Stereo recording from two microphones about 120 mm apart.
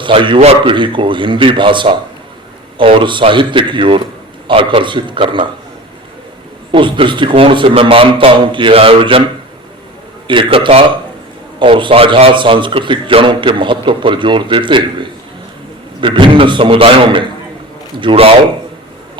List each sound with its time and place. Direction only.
0.0 s a man's voice: 45° right (ahead or behind)
6.7 s a man's voice: 45° right (ahead or behind)
10.2 s a man's voice: 45° right (ahead or behind)